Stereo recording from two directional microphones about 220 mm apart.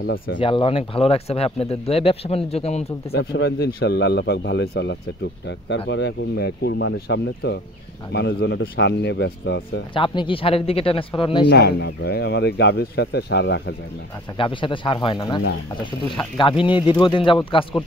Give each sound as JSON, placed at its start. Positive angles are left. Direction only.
{"t": 0.0, "sound": "speech", "side_deg": 55}
{"t": 0.4, "sound": "speech", "side_deg": 25}
{"t": 3.1, "sound": "speech", "side_deg": 45}
{"t": 9.9, "sound": "speech", "side_deg": 25}
{"t": 11.4, "sound": "speech", "side_deg": 50}
{"t": 14.3, "sound": "speech", "side_deg": 20}